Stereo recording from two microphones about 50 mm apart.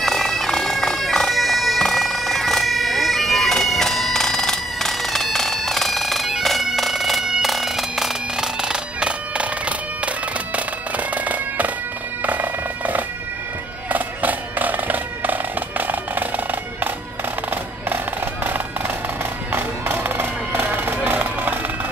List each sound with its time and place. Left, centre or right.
0.0 s bagpipes: centre; by 11.7 s right
12.2 s music: right
17.8 s music: right